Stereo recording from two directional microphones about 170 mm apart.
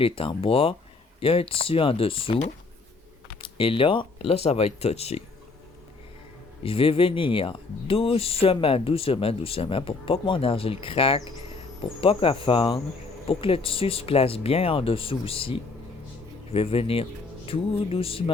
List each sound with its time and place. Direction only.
0.0 s speech: 30° left (ahead or behind)
3.6 s speech: 30° left (ahead or behind)
6.6 s speech: 35° left (ahead or behind)